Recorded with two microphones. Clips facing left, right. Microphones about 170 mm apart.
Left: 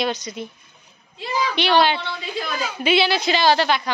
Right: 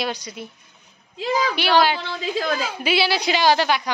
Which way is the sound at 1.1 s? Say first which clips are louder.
Right 3 dB; 90° right.